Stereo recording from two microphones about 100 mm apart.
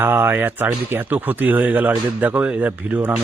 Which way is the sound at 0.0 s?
20° right (ahead or behind).